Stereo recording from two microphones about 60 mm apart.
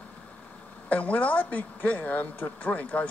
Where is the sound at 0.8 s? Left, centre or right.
Left.